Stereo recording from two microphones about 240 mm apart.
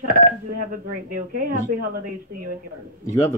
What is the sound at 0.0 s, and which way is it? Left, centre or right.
A woman's voice, right.